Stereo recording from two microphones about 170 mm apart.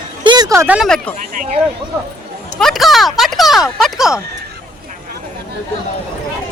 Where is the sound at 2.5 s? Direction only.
Centre (ahead or behind).